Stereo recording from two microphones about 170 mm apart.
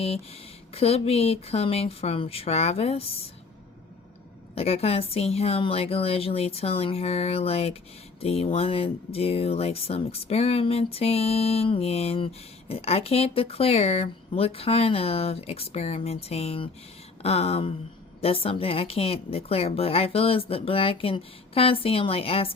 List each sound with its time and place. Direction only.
0.7 s speech: 35° left (ahead or behind)
4.5 s speech: 35° left (ahead or behind)